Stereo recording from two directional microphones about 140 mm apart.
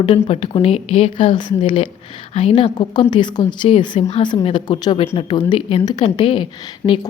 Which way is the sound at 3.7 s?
45° left (ahead or behind).